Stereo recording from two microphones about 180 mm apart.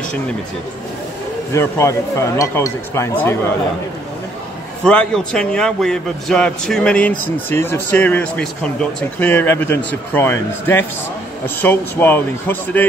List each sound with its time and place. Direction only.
1.5 s speech: 15° left (ahead or behind)
4.8 s a man's voice: 5° left (ahead or behind)